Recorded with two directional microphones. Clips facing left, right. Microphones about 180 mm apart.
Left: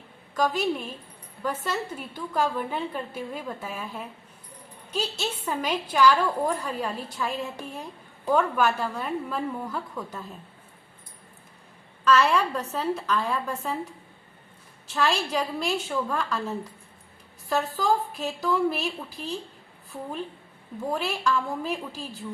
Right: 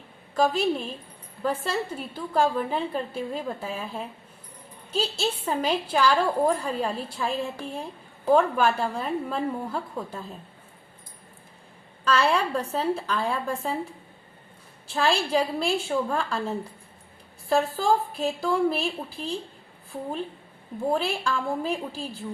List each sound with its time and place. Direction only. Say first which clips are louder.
0.3 s a woman's voice: right 2 dB; 30° right (ahead or behind)
12.0 s a woman's voice: left 1 dB; 30° right (ahead or behind)
14.8 s a woman's voice: right 2 dB; 35° right (ahead or behind)
18.2 s a woman's voice: right 2 dB; 30° right (ahead or behind)
20.9 s a woman's voice: left 1 dB; 30° right (ahead or behind)